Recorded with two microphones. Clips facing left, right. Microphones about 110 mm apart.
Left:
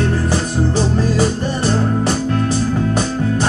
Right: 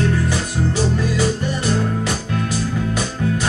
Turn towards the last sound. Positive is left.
turn(degrees=35)  # may be behind; listen again after turning